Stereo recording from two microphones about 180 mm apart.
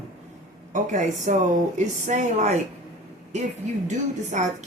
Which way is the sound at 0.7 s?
45° right (ahead or behind).